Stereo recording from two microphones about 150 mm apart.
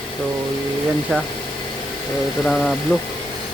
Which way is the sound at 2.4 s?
Centre (ahead or behind).